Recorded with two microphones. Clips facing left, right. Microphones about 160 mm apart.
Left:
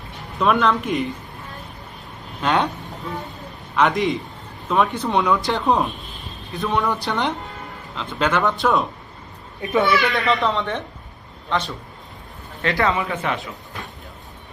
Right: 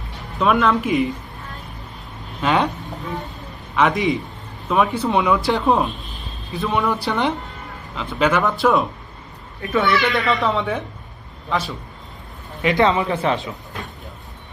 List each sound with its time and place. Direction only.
0.3 s speech: centre (ahead or behind)
2.4 s speech: centre (ahead or behind)
3.8 s speech: centre (ahead or behind)
9.6 s speech: 20° left (ahead or behind)
9.9 s a man's voice: centre (ahead or behind)
12.6 s speech: 20° right (ahead or behind)